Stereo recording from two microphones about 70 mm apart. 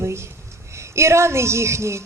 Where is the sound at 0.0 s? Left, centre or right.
Right.